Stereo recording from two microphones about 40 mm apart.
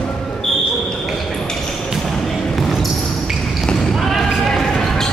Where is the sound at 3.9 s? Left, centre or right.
Centre.